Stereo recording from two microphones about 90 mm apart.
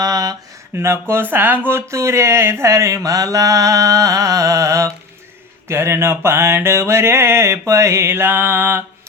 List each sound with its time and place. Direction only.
0.0 s a sound: 45° right (ahead or behind)
0.7 s speech: 30° right (ahead or behind)
5.6 s mantra: 30° right (ahead or behind)